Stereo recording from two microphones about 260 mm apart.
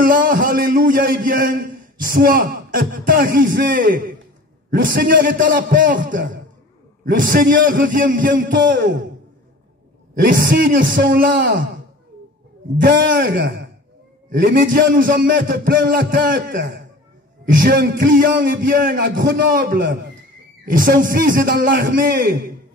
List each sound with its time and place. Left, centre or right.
0.0 s a man's voice: right
10.4 s a man's voice: right
12.8 s a man's voice: right